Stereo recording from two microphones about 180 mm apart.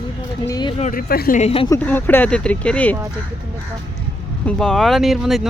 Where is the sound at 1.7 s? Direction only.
10° left (ahead or behind).